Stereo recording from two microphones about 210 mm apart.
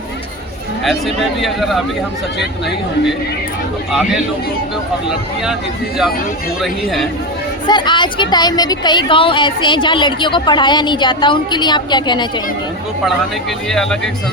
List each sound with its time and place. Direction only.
0.9 s speech: centre (ahead or behind)
6.6 s speech: centre (ahead or behind)
7.7 s a woman's voice: 20° left (ahead or behind)
13.7 s speech: centre (ahead or behind)